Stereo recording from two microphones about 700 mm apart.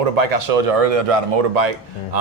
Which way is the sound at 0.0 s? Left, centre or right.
Right.